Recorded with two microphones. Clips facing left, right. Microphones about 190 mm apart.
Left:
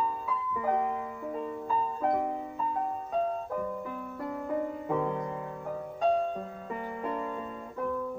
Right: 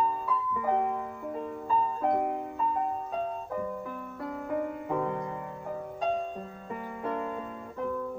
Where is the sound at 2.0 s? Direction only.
5° right (ahead or behind).